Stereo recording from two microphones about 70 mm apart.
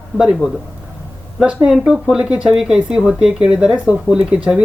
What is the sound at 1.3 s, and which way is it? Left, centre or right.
Speech, centre.